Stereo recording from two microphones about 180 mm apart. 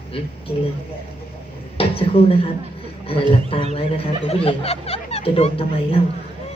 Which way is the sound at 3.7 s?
30° left (ahead or behind).